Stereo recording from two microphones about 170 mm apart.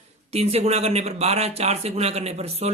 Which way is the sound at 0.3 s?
35° right (ahead or behind).